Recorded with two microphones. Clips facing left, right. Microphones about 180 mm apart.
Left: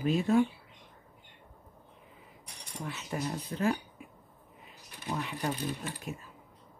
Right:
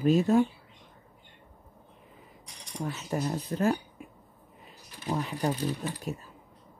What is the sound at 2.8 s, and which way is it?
Speech, 40° right (ahead or behind).